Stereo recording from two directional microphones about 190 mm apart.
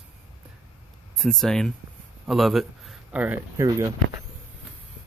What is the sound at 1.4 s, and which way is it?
Speech, 5° left (ahead or behind).